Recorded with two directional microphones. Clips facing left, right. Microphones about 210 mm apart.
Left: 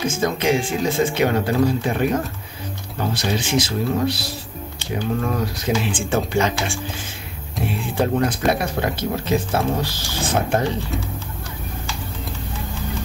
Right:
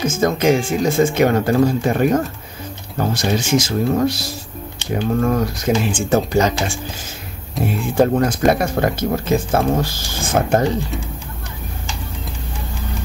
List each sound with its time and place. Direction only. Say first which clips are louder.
0.2 s speech: right 5 dB; 45° right (ahead or behind)